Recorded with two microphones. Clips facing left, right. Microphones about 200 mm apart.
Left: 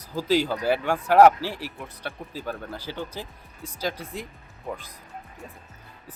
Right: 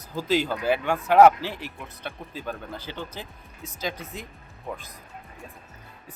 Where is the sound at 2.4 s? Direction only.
5° left (ahead or behind).